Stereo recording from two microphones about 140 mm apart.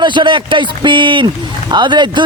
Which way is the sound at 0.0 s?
35° right (ahead or behind).